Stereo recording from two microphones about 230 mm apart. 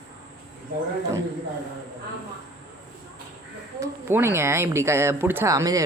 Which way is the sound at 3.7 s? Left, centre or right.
Centre.